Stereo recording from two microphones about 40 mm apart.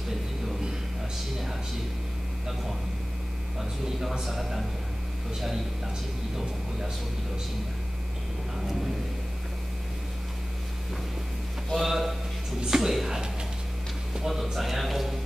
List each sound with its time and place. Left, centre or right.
4.2 s speech: centre
11.8 s a man's voice: centre
14.1 s a sound: centre
14.4 s speech: centre